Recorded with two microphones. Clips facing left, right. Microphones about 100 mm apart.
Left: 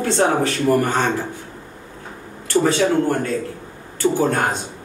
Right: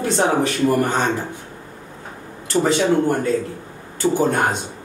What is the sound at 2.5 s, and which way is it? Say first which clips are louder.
Speech: even; 20° right (ahead or behind).